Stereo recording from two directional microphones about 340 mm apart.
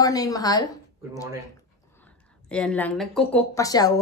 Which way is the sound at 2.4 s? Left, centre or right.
Centre.